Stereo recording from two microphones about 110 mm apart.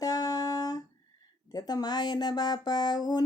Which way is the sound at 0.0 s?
35° left (ahead or behind).